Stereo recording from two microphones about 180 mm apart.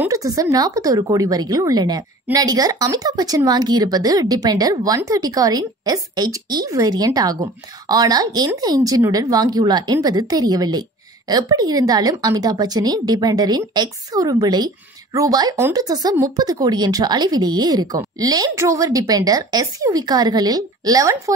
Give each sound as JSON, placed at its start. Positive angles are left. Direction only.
{"t": 0.0, "sound": "speech", "side_deg": -20}